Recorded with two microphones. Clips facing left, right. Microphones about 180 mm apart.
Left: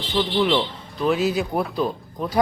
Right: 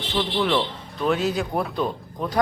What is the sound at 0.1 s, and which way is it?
Speech, centre (ahead or behind).